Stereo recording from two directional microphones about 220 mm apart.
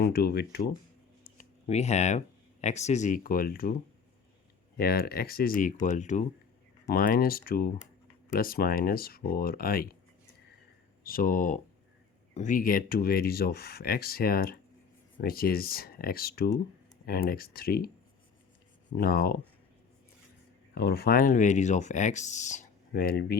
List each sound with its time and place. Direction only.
0.0 s speech: 45° left (ahead or behind)
1.2 s speech: 35° left (ahead or behind)
4.8 s speech: 45° left (ahead or behind)
11.0 s speech: 40° left (ahead or behind)
18.9 s speech: 40° left (ahead or behind)
20.7 s speech: 45° left (ahead or behind)